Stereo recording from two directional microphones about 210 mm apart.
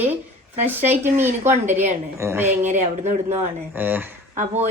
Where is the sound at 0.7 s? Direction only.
10° right (ahead or behind).